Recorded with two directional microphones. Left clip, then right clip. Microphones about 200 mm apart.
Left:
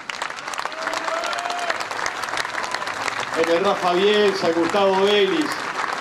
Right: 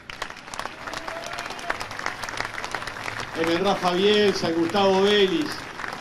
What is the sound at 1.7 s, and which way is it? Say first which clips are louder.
Applause: left 5 dB; 50° left (ahead or behind).